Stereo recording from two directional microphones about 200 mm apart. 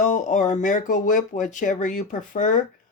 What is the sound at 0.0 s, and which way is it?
Speech, 35° left (ahead or behind).